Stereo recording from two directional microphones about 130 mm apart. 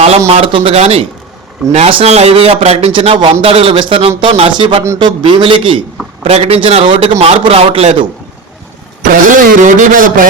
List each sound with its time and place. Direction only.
0.3 s a man's voice: 45° right (ahead or behind)
6.2 s speech: 50° right (ahead or behind)
9.3 s speech: 90° right